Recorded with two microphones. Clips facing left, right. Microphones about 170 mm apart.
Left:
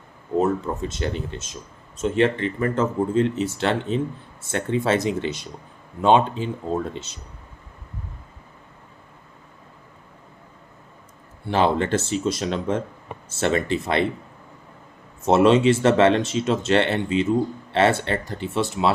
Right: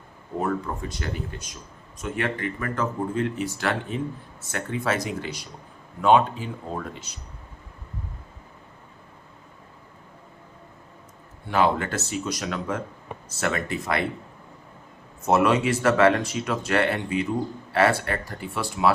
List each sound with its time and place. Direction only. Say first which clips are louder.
0.3 s speech: left 5 dB; 25° left (ahead or behind)
11.4 s speech: left 2 dB; 30° left (ahead or behind)
15.2 s speech: left 5 dB; 25° left (ahead or behind)